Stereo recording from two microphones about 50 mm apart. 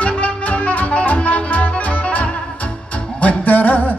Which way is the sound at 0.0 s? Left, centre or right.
Left.